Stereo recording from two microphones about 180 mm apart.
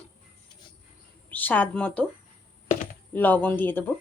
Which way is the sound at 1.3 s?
10° left (ahead or behind).